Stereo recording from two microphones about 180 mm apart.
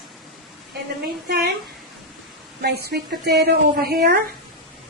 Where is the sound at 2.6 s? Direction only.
60° right (ahead or behind).